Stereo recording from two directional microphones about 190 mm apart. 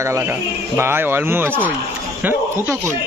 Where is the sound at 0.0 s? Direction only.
15° right (ahead or behind).